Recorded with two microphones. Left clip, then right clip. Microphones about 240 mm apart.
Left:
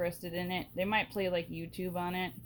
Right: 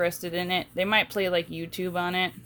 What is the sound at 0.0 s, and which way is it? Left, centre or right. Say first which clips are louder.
Speech: right 8 dB; right.